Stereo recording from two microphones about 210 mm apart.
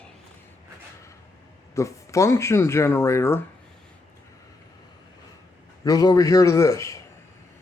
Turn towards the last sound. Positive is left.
turn(degrees=15)  # may be behind; listen again after turning